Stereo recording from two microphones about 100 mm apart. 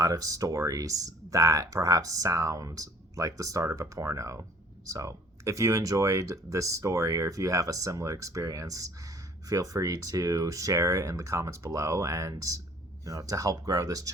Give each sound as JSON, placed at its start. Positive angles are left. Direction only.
{"t": 0.0, "sound": "speech", "side_deg": -35}